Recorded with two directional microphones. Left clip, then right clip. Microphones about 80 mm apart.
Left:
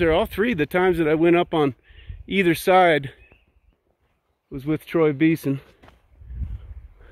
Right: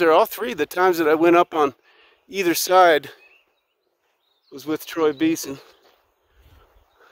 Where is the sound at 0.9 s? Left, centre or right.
Right.